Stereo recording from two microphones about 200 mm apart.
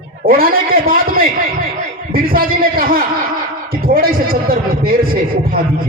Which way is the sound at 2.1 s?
45° right (ahead or behind).